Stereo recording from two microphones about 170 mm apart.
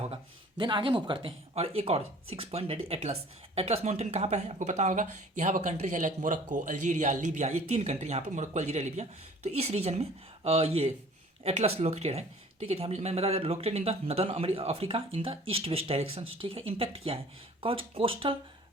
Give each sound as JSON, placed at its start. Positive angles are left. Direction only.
{"t": 0.0, "sound": "speech", "side_deg": -30}